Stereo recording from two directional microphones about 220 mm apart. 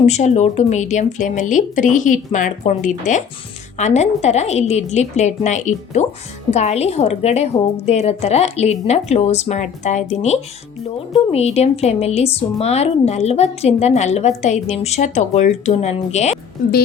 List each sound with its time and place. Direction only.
0.0 s speech: 30° left (ahead or behind)